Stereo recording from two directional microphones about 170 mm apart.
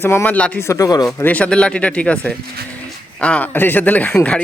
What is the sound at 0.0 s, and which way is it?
Speech, 15° left (ahead or behind).